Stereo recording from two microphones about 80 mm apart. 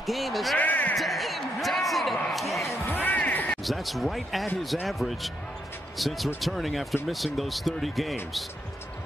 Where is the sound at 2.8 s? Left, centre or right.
Left.